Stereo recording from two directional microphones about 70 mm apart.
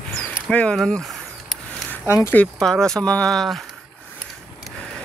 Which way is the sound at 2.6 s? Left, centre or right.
Centre.